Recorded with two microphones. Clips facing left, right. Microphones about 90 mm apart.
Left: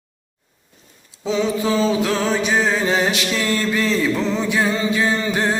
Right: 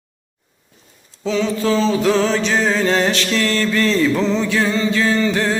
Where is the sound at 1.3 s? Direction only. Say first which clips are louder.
Right 1 dB; 15° left (ahead or behind).